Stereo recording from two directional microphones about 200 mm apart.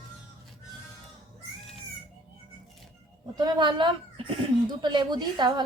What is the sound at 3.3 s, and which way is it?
A woman's voice, 20° right (ahead or behind).